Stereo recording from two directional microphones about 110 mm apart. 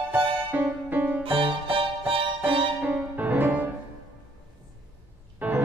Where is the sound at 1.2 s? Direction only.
50° right (ahead or behind).